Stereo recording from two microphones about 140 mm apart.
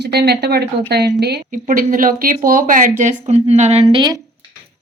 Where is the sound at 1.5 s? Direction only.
75° right (ahead or behind); by 4.1 s 40° right (ahead or behind).